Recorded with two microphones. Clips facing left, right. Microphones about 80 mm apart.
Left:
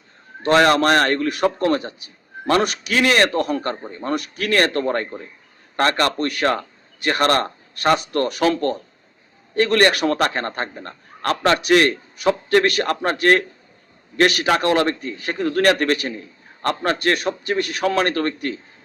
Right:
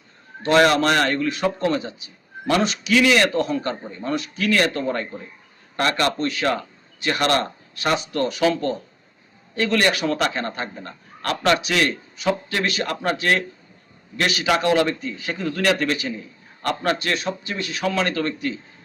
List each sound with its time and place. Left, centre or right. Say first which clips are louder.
0.4 s a man's voice: left 1 dB; left
6.1 s a man's voice: left 2 dB; left
16.6 s a man's voice: left 3 dB; left